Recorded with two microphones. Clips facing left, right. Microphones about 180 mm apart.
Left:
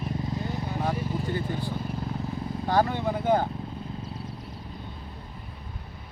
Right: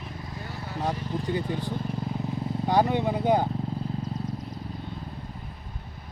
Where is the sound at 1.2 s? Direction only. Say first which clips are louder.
Right 1 dB; 20° right (ahead or behind).